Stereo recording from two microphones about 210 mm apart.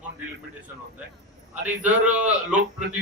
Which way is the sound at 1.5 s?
5° right (ahead or behind).